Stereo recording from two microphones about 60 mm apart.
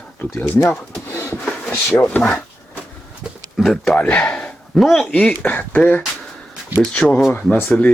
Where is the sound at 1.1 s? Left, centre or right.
Left.